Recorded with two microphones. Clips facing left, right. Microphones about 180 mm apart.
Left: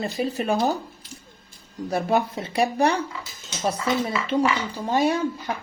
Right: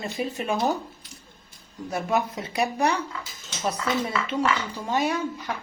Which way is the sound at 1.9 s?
30° left (ahead or behind).